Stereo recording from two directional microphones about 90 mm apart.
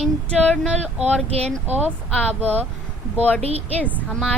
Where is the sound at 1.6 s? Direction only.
20° right (ahead or behind).